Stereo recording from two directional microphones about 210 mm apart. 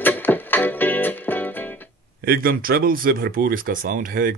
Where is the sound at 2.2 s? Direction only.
45° right (ahead or behind).